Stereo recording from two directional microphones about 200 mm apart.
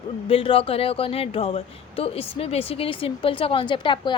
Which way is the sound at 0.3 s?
30° left (ahead or behind).